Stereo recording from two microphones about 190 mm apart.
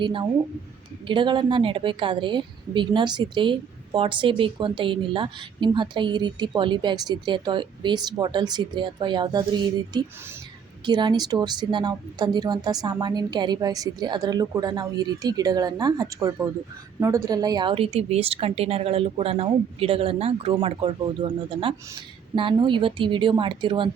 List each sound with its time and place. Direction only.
0.0 s a woman's voice: 25° right (ahead or behind)